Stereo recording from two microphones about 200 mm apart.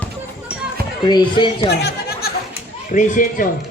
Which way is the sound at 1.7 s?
55° left (ahead or behind).